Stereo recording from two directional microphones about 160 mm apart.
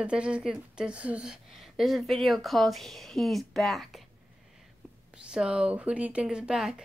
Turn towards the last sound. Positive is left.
turn(degrees=-5)  # may be behind; listen again after turning